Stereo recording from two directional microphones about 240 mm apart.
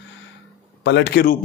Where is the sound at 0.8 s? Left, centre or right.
Left.